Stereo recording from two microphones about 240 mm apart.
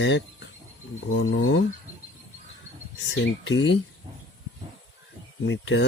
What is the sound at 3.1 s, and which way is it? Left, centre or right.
Speech, left.